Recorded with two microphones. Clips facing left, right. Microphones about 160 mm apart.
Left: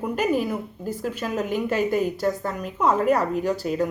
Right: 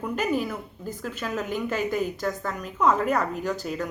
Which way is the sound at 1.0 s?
40° left (ahead or behind).